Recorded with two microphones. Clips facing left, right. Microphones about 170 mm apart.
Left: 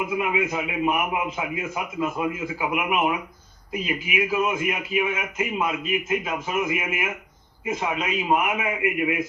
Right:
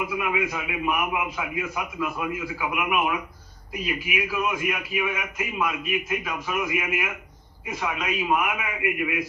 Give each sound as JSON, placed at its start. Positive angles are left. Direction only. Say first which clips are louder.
{"t": 0.1, "sound": "a man's voice", "louder": "left 2 dB", "side_deg": 25}